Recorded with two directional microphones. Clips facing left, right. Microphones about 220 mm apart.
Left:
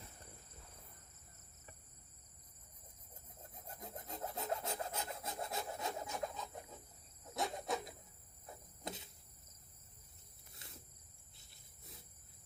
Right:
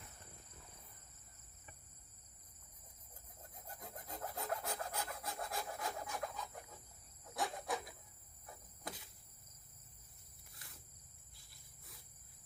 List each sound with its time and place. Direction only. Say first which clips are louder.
3.7 s filing: left 2 dB; 20° left (ahead or behind)
7.3 s a sound: left 1 dB; 25° left (ahead or behind)
10.5 s cricket: left 4 dB; 25° left (ahead or behind)
11.3 s insect: left 2 dB; 25° left (ahead or behind)